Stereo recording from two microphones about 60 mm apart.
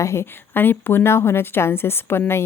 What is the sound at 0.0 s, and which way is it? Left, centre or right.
A woman's voice, left.